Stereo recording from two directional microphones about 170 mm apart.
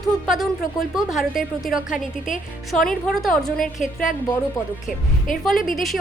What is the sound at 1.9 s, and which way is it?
Speech, 50° left (ahead or behind).